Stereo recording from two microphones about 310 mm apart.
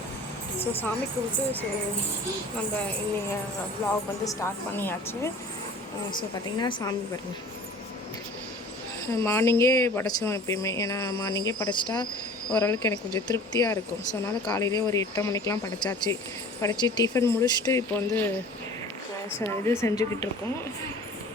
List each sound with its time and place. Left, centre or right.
0.6 s a woman's voice: centre
4.2 s a woman's voice: centre
6.6 s a woman's voice: centre
9.1 s a woman's voice: centre
19.4 s a woman's voice: centre